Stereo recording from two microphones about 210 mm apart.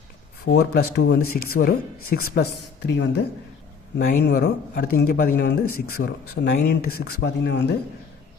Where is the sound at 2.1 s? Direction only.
45° left (ahead or behind).